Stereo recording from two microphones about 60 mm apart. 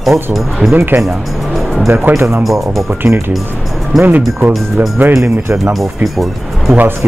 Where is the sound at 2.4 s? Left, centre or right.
Centre.